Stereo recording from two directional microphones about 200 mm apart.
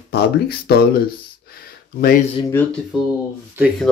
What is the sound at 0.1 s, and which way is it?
Speech, 50° left (ahead or behind).